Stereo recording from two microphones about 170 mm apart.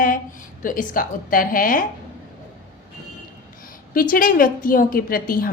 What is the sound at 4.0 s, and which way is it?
A woman's voice, 55° left (ahead or behind).